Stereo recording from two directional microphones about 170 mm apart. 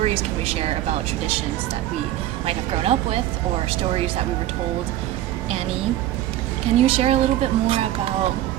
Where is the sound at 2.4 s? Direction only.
35° right (ahead or behind).